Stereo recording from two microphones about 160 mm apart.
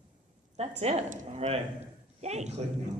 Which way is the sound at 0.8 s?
45° right (ahead or behind).